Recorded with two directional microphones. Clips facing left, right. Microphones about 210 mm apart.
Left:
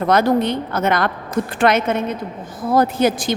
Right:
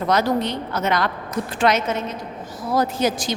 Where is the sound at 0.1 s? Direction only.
55° left (ahead or behind).